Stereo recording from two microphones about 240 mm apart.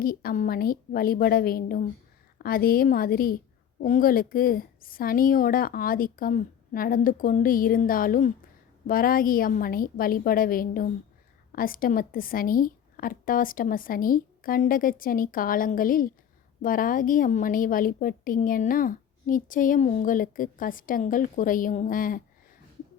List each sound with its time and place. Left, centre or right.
0.0 s a woman's voice: left